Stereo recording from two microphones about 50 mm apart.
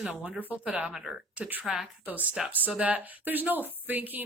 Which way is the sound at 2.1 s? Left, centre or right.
Right.